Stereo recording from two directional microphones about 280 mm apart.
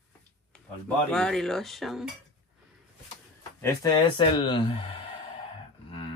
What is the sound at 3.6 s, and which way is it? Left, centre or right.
Speech, centre.